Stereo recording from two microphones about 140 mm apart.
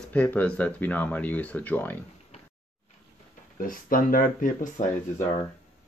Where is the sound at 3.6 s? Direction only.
85° left.